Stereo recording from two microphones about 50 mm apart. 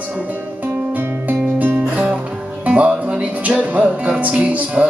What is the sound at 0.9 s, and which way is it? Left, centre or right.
Music, right.